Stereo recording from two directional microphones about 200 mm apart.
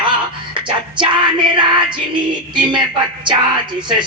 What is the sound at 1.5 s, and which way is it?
Music, 25° right (ahead or behind).